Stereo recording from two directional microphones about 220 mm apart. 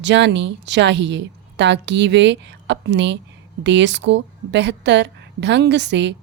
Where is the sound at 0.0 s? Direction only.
55° right (ahead or behind).